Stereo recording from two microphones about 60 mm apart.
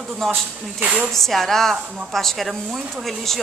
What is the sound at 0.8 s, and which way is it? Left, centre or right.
Speech, right.